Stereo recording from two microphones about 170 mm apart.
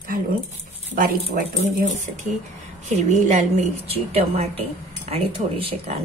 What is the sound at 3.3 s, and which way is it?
Speech, 45° right (ahead or behind).